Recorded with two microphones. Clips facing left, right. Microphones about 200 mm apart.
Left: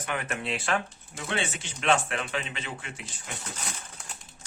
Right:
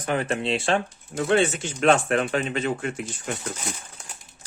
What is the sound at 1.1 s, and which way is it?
Speech, 45° right (ahead or behind).